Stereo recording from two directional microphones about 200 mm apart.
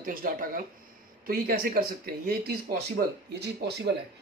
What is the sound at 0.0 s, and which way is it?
Speech, 45° right (ahead or behind).